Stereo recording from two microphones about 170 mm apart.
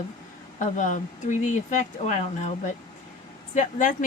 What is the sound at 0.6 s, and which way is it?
Speech, 45° left (ahead or behind).